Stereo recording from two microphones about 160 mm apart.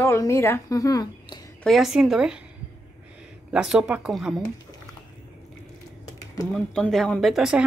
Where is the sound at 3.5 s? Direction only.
Centre (ahead or behind).